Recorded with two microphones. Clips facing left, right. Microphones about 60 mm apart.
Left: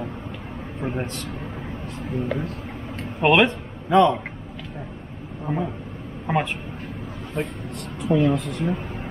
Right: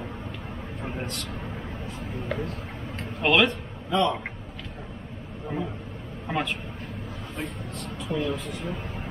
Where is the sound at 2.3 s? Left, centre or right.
Centre.